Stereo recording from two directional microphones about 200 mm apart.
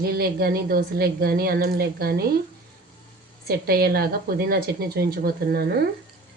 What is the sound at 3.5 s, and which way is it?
A woman's voice, 50° right (ahead or behind).